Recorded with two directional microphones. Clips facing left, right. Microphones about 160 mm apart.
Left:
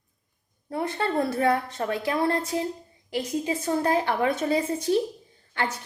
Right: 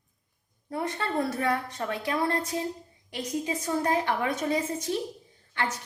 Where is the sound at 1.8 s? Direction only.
30° left (ahead or behind).